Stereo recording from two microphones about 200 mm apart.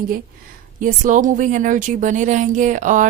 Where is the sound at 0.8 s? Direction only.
40° right (ahead or behind).